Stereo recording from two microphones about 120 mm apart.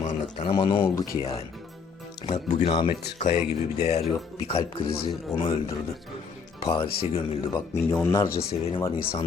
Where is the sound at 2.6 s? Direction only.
50° left (ahead or behind).